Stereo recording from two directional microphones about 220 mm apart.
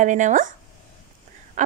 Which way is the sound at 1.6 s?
35° right (ahead or behind).